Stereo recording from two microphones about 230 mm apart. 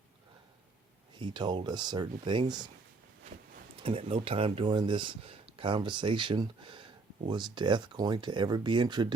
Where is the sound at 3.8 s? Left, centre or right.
Right.